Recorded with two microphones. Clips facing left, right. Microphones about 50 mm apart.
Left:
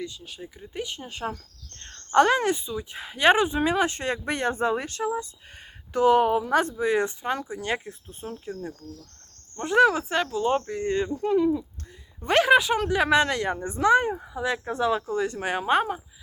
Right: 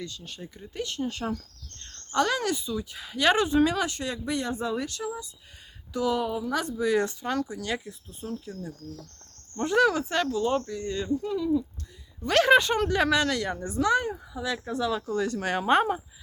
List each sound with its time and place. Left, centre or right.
0.2 s speech: centre
2.1 s speech: left
9.6 s speech: centre
10.7 s speech: left
12.4 s speech: centre
13.1 s speech: left
15.6 s speech: centre